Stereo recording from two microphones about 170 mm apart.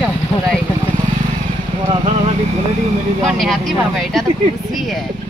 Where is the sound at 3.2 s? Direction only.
Centre (ahead or behind).